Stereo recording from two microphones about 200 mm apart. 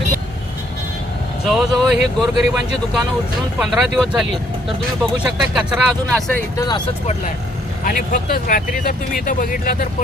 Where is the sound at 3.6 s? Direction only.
5° right (ahead or behind).